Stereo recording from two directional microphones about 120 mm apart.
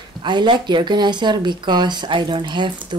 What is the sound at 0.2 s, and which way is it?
Speech, 40° right (ahead or behind).